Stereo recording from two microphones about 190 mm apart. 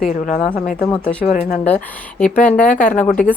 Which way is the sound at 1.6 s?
5° left (ahead or behind).